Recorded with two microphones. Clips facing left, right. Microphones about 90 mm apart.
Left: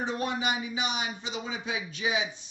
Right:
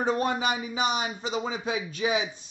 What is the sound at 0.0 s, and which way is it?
Speech, 40° right (ahead or behind).